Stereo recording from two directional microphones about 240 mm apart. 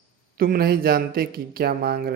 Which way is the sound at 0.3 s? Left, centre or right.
Right.